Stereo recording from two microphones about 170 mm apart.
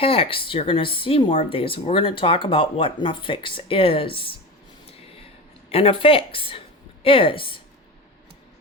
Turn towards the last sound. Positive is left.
turn(degrees=30)  # may be behind; listen again after turning